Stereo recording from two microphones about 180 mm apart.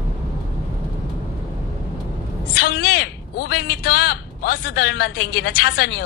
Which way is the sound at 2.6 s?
55° left (ahead or behind).